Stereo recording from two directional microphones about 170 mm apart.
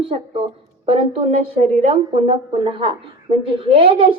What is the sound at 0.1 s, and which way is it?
Speech, 35° right (ahead or behind).